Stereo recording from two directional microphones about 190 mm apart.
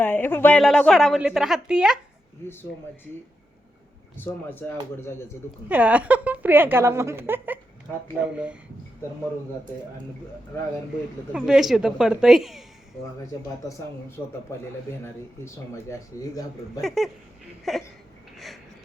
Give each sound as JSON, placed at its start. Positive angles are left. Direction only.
{"t": 0.0, "sound": "a woman's voice", "side_deg": 10}
{"t": 4.2, "sound": "a man's voice", "side_deg": 10}
{"t": 5.6, "sound": "a woman's voice", "side_deg": -10}
{"t": 11.3, "sound": "a woman's voice", "side_deg": -5}
{"t": 14.5, "sound": "a man's voice", "side_deg": 15}
{"t": 16.8, "sound": "a woman's voice", "side_deg": 0}
{"t": 18.3, "sound": "a sound", "side_deg": 0}